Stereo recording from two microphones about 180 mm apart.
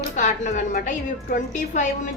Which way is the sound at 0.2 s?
45° left (ahead or behind).